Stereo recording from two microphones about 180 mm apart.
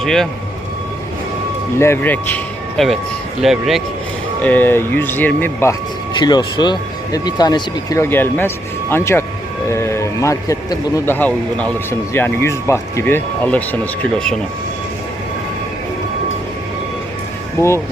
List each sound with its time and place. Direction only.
0.0 s speech: centre (ahead or behind)
1.8 s speech: 10° left (ahead or behind)
4.4 s a man's voice: 10° left (ahead or behind)
6.1 s a man's voice: 25° left (ahead or behind); by 14.3 s 5° left (ahead or behind)
17.6 s a man's voice: 15° left (ahead or behind)